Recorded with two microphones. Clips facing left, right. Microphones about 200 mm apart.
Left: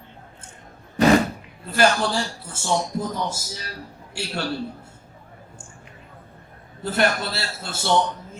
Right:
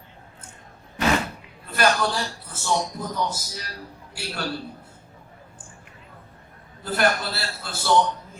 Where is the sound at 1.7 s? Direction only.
25° left (ahead or behind).